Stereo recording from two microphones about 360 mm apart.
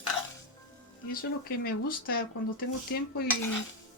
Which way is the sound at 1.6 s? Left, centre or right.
Left.